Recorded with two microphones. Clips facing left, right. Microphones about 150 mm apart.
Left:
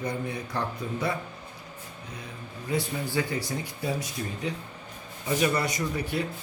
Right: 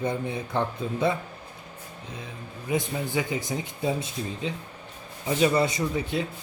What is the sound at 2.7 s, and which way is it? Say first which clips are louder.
Speech: right 1 dB; 20° right (ahead or behind).